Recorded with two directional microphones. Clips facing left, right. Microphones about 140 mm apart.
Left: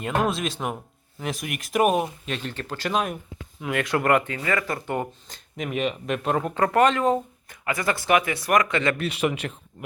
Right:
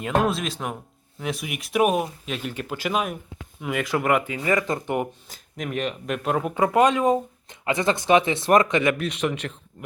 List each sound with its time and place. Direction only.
0.0 s speech: centre (ahead or behind)
4.4 s speech: 20° right (ahead or behind)
5.3 s speech: centre (ahead or behind); by 9.0 s 15° right (ahead or behind)
9.0 s speech: 5° left (ahead or behind)